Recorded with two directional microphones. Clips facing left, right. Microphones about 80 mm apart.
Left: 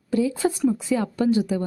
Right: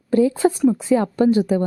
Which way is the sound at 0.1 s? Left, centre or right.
Right.